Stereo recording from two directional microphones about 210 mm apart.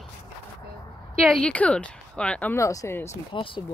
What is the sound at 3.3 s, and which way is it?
Speech, 25° left (ahead or behind).